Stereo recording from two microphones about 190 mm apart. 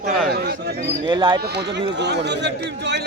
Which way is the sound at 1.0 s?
25° right (ahead or behind).